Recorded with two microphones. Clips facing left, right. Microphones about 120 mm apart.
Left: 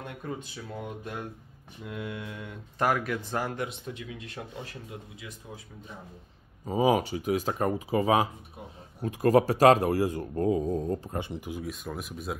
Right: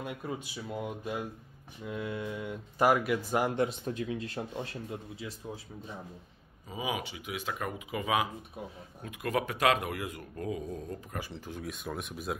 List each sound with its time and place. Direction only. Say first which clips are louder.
0.0 s speech: even; 5° right (ahead or behind)
3.6 s speech: right 4 dB; 40° right (ahead or behind)
6.6 s speech: left 11 dB; 40° left (ahead or behind); by 11.6 s 15° left (ahead or behind)
11.6 s speech: left 2 dB; centre (ahead or behind)